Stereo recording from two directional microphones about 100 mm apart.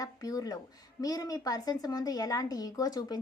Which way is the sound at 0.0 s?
40° left (ahead or behind).